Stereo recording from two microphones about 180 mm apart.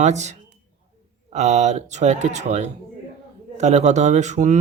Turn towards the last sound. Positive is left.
turn(degrees=-40)  # may be behind; listen again after turning